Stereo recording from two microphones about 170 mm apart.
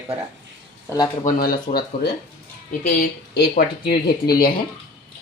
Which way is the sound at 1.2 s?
55° left (ahead or behind).